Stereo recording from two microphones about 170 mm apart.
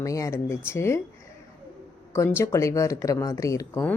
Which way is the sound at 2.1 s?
15° left (ahead or behind).